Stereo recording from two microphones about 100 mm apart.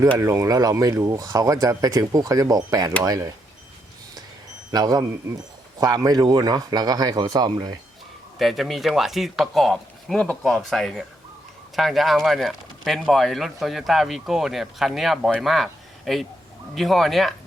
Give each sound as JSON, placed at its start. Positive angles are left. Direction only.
{"t": 0.2, "sound": "speech", "side_deg": -30}
{"t": 4.7, "sound": "speech", "side_deg": -40}
{"t": 8.4, "sound": "speech", "side_deg": 0}